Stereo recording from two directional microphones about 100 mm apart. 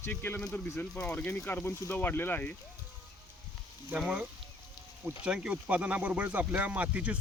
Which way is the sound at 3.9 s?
15° right (ahead or behind).